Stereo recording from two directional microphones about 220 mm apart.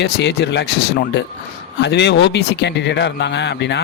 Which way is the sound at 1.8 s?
50° left (ahead or behind).